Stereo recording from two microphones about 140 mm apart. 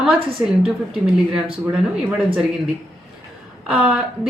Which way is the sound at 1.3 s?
5° right (ahead or behind).